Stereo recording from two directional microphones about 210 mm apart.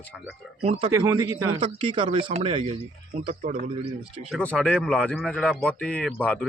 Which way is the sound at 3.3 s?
40° right (ahead or behind).